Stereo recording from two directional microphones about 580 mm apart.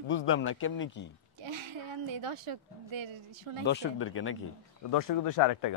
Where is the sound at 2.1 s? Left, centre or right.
Right.